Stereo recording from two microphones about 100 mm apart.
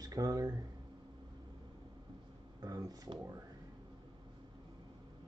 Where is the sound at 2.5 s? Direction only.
40° right (ahead or behind).